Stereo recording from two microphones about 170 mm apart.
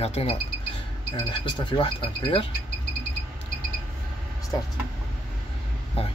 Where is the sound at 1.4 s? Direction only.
30° left (ahead or behind).